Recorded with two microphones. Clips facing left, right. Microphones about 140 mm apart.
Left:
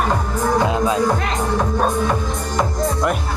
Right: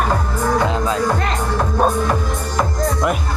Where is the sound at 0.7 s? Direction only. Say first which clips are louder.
Left 2 dB; 15° left (ahead or behind).